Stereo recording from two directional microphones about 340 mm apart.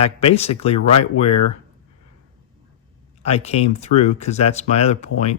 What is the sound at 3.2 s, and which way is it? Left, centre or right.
Speech, centre.